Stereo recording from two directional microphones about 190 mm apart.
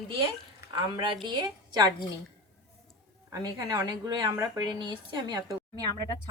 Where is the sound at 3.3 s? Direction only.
20° right (ahead or behind).